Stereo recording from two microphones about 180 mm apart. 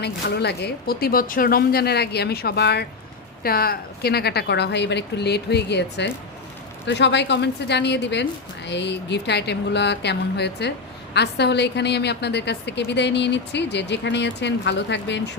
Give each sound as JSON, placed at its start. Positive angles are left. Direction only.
{"t": 0.0, "sound": "a woman's voice", "side_deg": 65}